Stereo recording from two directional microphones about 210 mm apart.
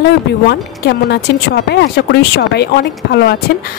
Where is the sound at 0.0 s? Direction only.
55° left (ahead or behind).